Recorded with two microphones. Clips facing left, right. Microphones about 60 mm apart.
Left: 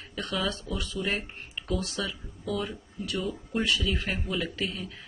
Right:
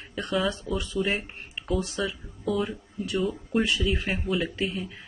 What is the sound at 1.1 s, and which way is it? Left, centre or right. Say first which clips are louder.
Speech: right 2 dB; centre.